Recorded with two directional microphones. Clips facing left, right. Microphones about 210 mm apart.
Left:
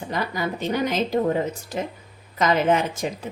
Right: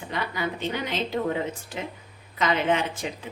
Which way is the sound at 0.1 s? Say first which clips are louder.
Left 3 dB; 40° left (ahead or behind).